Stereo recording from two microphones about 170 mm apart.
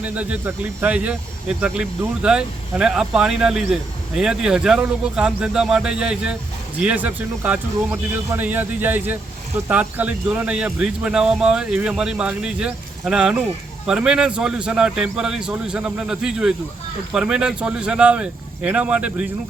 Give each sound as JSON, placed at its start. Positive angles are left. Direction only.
{"t": 0.0, "sound": "speech", "side_deg": -10}